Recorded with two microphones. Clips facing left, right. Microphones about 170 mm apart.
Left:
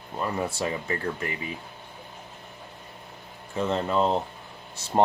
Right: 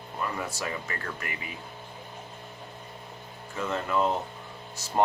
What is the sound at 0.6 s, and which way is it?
Speech, 25° left (ahead or behind).